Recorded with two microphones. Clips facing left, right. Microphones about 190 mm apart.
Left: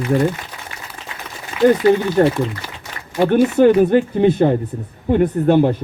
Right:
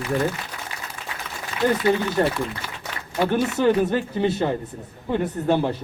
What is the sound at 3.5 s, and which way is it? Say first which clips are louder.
A woman's voice: left 8 dB; 55° left (ahead or behind).